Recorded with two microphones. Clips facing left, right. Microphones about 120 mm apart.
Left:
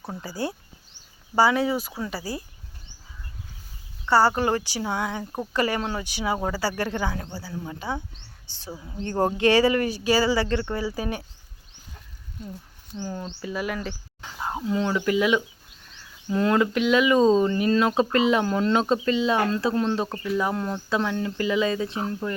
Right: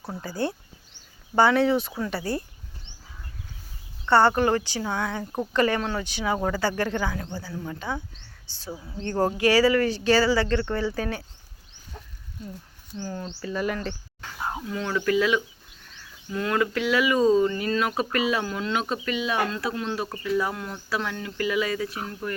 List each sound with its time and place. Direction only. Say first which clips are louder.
1.4 s speech: right 1 dB; 10° left (ahead or behind)
4.0 s speech: right 1 dB; 5° left (ahead or behind)
4.4 s speech: right 1 dB; 20° left (ahead or behind)
13.0 s speech: left 1 dB; 15° left (ahead or behind)
14.2 s speech: left 2 dB; 20° left (ahead or behind)
20.1 s speech: left 1 dB; 20° left (ahead or behind)